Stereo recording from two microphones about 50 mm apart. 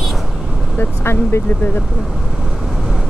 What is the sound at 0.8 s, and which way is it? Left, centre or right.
Speech, left.